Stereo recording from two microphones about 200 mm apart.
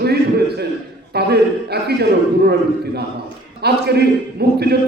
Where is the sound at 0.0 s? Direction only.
55° right (ahead or behind).